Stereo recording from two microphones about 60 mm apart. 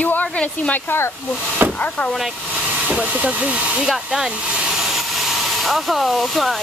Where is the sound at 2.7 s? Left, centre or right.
Centre.